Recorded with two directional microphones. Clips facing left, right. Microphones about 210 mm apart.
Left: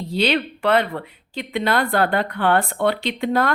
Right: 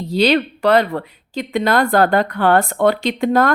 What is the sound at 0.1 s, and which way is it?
Speech, 40° right (ahead or behind).